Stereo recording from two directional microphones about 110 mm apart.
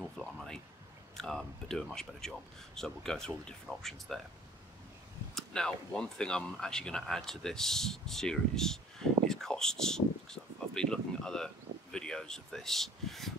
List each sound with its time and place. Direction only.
0.0 s speech: centre (ahead or behind)
5.3 s speech: 5° left (ahead or behind)